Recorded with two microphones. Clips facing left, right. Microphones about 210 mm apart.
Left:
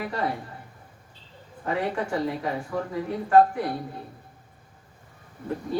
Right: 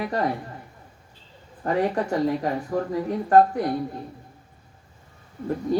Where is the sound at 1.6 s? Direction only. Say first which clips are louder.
Right 4 dB; 40° right (ahead or behind).